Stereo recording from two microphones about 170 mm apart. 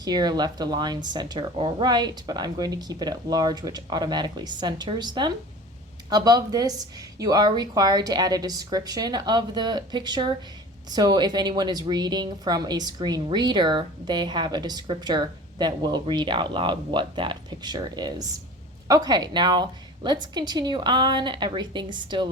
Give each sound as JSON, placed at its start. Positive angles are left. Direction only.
{"t": 0.0, "sound": "a woman's voice", "side_deg": -25}